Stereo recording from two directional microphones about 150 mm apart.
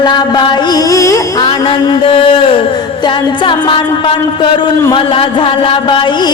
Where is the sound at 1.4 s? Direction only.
35° left (ahead or behind).